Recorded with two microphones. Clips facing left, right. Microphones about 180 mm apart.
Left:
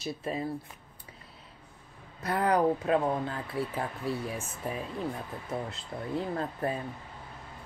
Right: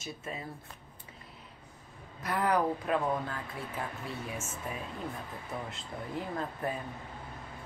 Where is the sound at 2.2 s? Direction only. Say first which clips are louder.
Left 3 dB; 25° left (ahead or behind).